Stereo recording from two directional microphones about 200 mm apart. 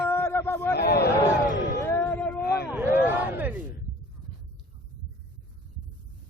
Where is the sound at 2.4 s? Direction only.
50° left (ahead or behind).